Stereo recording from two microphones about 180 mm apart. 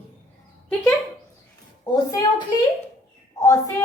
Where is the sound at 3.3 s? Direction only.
20° left (ahead or behind).